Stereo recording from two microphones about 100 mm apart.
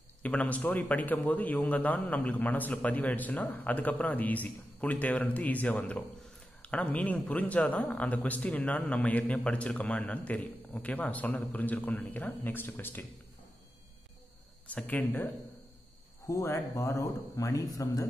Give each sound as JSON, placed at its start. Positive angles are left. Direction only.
{"t": 0.2, "sound": "a man's voice", "side_deg": 15}
{"t": 14.7, "sound": "a man's voice", "side_deg": 15}
{"t": 16.3, "sound": "speech", "side_deg": 30}